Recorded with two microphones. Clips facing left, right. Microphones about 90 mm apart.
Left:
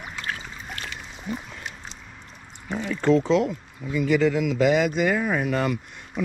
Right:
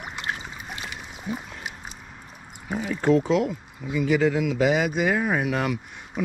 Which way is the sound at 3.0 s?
10° right (ahead or behind).